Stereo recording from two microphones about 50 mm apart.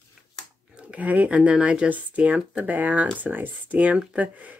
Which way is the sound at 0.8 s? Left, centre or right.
Right.